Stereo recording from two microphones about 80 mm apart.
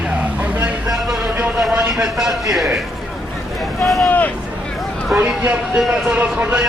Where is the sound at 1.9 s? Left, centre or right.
Centre.